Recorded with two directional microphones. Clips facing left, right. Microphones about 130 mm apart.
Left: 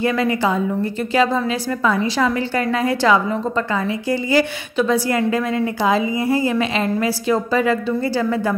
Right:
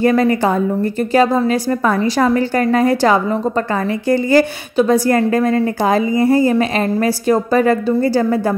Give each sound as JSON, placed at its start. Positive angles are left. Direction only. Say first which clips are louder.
{"t": 0.0, "sound": "a woman's voice", "louder": "right 5 dB", "side_deg": -45}